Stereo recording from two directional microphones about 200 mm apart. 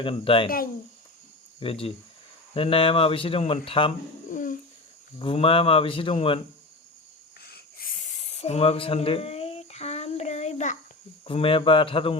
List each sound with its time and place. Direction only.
0.0 s speech: 25° left (ahead or behind)
1.5 s speech: 30° left (ahead or behind)
4.3 s a sound: 40° left (ahead or behind)
5.2 s speech: 25° left (ahead or behind)
7.4 s a sound: 50° left (ahead or behind)
11.3 s speech: 25° left (ahead or behind)